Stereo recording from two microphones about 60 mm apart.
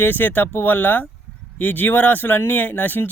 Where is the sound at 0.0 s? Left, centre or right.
Left.